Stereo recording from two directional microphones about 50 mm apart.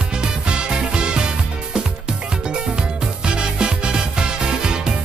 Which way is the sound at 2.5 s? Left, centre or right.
Centre.